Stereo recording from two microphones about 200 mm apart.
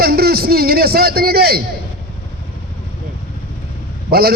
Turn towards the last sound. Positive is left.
turn(degrees=-50)  # may be behind; listen again after turning